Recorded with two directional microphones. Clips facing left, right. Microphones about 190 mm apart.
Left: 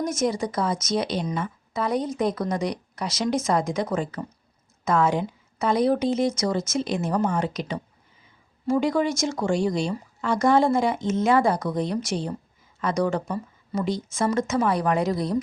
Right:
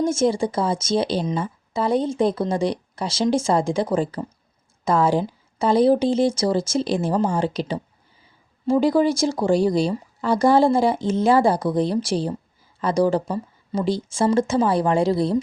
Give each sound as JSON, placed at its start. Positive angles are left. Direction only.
{"t": 0.0, "sound": "speech", "side_deg": -30}